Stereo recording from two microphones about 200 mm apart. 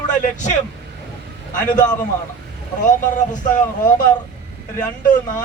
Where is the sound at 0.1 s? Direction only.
40° left (ahead or behind).